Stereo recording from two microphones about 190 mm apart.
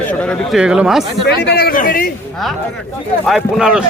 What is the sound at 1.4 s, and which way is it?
Speech, 60° left (ahead or behind).